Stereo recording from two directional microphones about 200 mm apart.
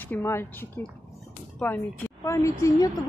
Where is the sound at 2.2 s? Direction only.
15° left (ahead or behind).